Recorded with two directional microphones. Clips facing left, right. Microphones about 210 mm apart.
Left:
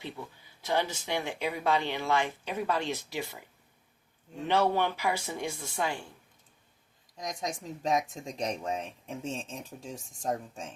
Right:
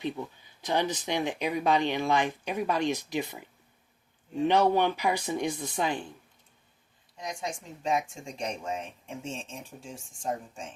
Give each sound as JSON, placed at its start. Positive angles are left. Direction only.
{"t": 0.6, "sound": "speech", "side_deg": -15}
{"t": 4.4, "sound": "speech", "side_deg": -15}
{"t": 7.2, "sound": "speech", "side_deg": 40}